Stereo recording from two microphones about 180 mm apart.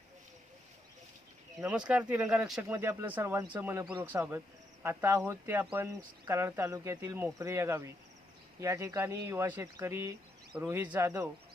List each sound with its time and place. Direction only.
1.6 s speech: 5° right (ahead or behind)